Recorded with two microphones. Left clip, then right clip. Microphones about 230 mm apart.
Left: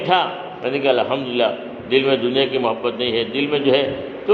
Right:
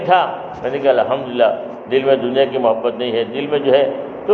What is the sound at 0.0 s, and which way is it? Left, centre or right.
A man's voice, left.